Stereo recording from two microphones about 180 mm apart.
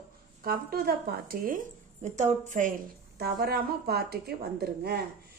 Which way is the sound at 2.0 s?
40° right (ahead or behind).